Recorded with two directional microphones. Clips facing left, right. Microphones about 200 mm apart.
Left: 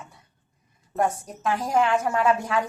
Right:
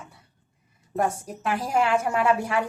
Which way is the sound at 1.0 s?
10° right (ahead or behind).